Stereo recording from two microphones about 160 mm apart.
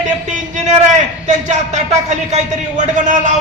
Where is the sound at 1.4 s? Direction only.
45° right (ahead or behind).